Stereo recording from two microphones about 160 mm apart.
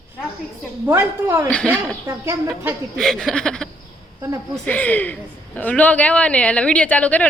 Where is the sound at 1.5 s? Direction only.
5° left (ahead or behind).